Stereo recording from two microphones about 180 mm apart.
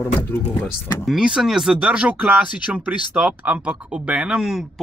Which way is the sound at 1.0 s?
Centre (ahead or behind).